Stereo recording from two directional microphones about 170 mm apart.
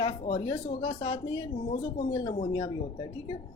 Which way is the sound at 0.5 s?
25° left (ahead or behind).